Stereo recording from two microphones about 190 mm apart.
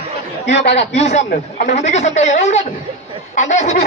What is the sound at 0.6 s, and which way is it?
Speech, 35° left (ahead or behind).